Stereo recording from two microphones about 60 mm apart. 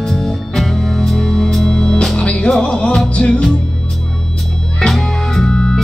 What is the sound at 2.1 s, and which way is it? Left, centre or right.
Music, centre.